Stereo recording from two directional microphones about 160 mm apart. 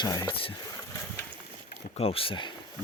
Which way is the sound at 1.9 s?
35° left (ahead or behind).